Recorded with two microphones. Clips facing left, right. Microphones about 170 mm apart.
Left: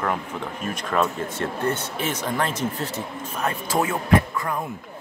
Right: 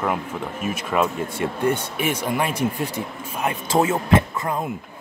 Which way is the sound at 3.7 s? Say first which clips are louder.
Right 3 dB; 25° right (ahead or behind).